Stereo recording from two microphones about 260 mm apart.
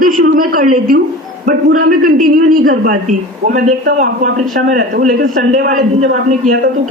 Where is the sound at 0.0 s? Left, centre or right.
Right.